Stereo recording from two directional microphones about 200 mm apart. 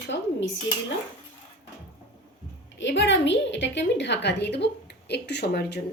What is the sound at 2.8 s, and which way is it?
Speech, 65° left (ahead or behind).